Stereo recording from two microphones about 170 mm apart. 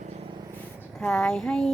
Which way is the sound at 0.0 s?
40° right (ahead or behind).